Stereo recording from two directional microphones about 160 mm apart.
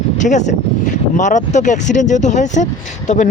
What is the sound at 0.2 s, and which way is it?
Speech, 50° left (ahead or behind).